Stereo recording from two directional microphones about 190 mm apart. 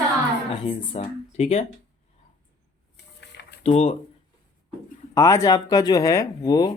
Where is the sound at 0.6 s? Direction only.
30° left (ahead or behind).